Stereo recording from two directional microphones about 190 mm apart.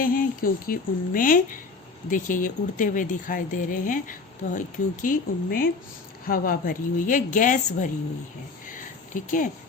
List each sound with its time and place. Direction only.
0.0 s speech: 50° left (ahead or behind)
9.1 s speech: 45° left (ahead or behind)